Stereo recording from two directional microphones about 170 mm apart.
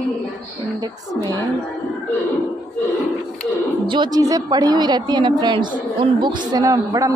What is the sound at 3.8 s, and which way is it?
A woman's voice, 30° right (ahead or behind).